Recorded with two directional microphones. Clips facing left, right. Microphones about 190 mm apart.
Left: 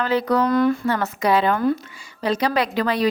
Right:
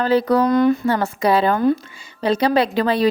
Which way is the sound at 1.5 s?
25° right (ahead or behind).